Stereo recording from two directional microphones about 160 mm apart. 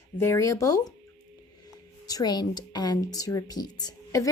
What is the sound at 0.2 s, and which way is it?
A woman's voice, 20° left (ahead or behind).